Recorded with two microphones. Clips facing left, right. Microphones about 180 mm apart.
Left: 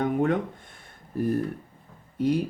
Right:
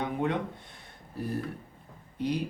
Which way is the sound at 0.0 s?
45° left (ahead or behind).